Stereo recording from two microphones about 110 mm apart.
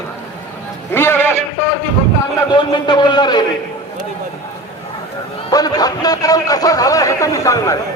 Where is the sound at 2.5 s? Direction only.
45° left (ahead or behind).